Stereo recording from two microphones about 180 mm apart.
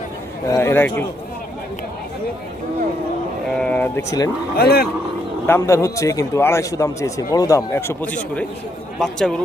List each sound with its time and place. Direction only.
0.5 s a man's voice: 10° left (ahead or behind)
3.6 s a man's voice: 10° left (ahead or behind)
4.5 s speech: 60° left (ahead or behind)
5.5 s a man's voice: 15° left (ahead or behind)